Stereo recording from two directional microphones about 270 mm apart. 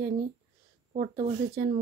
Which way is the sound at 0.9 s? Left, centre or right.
Right.